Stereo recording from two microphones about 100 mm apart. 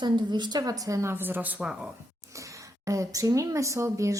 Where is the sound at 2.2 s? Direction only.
30° right (ahead or behind).